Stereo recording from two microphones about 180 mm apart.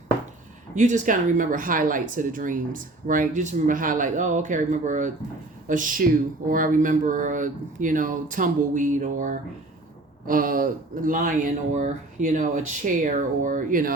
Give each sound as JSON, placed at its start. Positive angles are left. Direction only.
{"t": 0.8, "sound": "speech", "side_deg": -45}